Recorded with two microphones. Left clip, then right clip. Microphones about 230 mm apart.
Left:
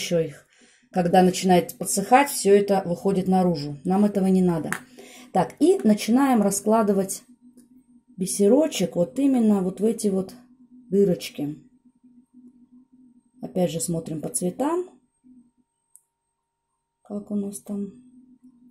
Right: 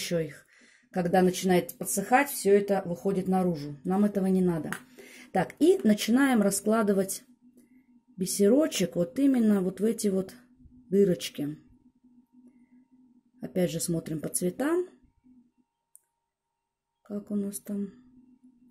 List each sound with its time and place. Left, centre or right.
0.0 s speech: centre
13.4 s speech: centre
17.1 s speech: right